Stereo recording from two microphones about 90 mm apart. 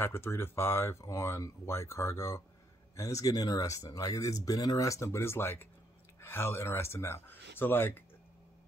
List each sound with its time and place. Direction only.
0.0 s speech: 25° left (ahead or behind)